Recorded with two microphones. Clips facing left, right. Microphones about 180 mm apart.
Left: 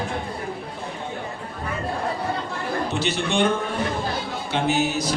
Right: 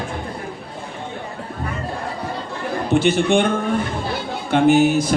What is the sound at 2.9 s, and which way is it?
Speech, 50° right (ahead or behind).